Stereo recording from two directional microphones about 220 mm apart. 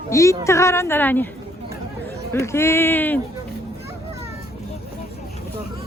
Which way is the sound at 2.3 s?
10° left (ahead or behind).